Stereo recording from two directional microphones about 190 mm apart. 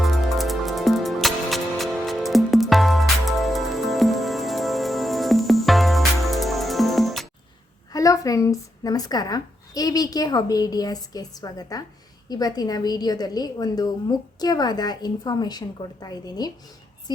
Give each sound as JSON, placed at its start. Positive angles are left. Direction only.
{"t": 0.0, "sound": "music", "side_deg": 0}
{"t": 7.9, "sound": "a woman's voice", "side_deg": 15}